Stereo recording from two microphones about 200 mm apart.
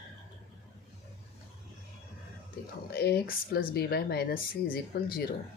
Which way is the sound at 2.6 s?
45° left (ahead or behind).